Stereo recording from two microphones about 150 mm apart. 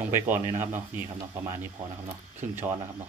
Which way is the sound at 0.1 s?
15° right (ahead or behind).